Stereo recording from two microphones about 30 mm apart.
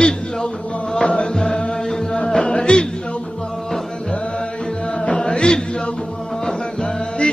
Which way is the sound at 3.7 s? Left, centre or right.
Centre.